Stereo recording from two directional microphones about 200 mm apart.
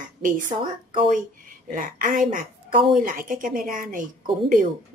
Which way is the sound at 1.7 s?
45° right (ahead or behind).